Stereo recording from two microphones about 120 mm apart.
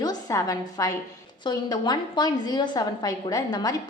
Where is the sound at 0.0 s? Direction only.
30° left (ahead or behind).